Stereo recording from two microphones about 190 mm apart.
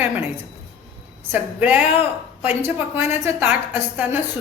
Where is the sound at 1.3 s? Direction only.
10° right (ahead or behind).